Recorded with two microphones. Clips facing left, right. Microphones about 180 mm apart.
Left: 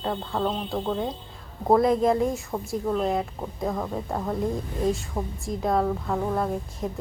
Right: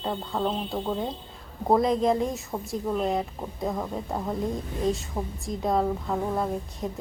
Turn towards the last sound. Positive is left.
turn(degrees=0)  # may be behind; listen again after turning